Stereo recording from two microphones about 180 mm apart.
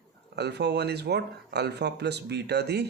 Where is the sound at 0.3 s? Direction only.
65° right (ahead or behind).